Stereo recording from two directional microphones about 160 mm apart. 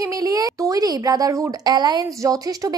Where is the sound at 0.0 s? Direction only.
20° right (ahead or behind).